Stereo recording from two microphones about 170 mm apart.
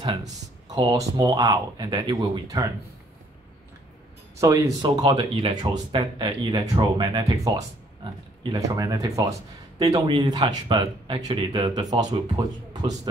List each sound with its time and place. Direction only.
0.7 s speech: 25° right (ahead or behind)
4.4 s speech: 20° right (ahead or behind)